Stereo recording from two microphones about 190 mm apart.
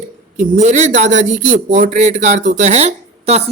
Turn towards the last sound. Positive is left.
turn(degrees=-35)  # may be behind; listen again after turning